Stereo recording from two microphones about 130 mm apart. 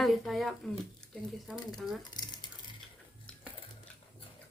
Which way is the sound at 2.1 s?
35° left (ahead or behind).